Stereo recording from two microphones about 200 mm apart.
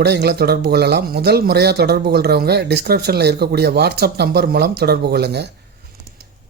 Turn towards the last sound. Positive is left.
turn(degrees=-55)  # may be behind; listen again after turning